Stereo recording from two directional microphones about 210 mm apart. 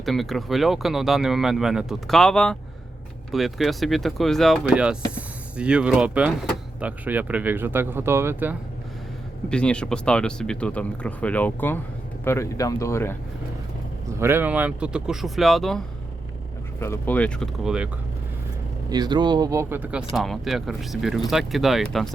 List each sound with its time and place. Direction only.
0.0 s speech: centre (ahead or behind)
9.5 s speech: 5° left (ahead or behind)
14.2 s speech: 10° right (ahead or behind)
16.8 s speech: 10° left (ahead or behind)
18.9 s speech: 20° right (ahead or behind); by 22.1 s centre (ahead or behind)